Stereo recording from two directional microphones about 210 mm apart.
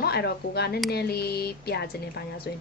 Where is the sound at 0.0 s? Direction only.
50° left (ahead or behind).